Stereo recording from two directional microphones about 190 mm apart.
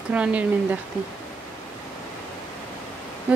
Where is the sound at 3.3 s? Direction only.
5° right (ahead or behind).